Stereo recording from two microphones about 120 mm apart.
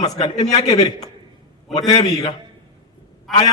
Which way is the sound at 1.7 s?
30° left (ahead or behind).